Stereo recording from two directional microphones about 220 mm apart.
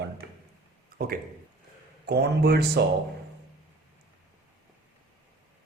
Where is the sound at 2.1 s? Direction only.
45° right (ahead or behind).